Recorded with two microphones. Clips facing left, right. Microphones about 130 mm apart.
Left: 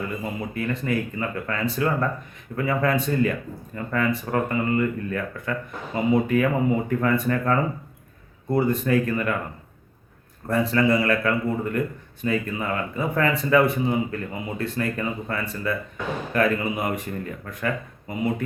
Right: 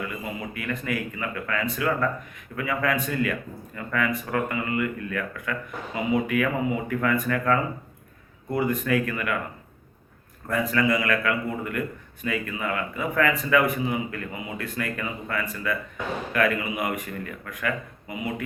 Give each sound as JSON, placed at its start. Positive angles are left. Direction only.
{"t": 0.5, "sound": "speech", "side_deg": 30}
{"t": 10.5, "sound": "speech", "side_deg": 30}